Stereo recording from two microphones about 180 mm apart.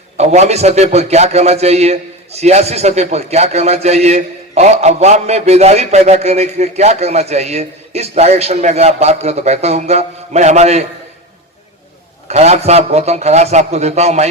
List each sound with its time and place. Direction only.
0.2 s a man's voice: 35° right (ahead or behind)
12.3 s a man's voice: 35° right (ahead or behind)